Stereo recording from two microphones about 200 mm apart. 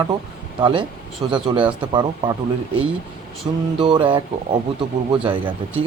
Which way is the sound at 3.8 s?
25° right (ahead or behind).